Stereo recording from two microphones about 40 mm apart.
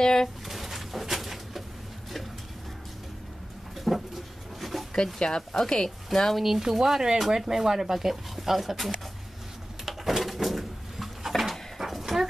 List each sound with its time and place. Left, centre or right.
0.0 s speech: centre
0.5 s pigeon: centre
3.7 s pigeon: centre
4.6 s dog: centre
4.9 s speech: centre
6.3 s speech: centre
9.8 s bird: centre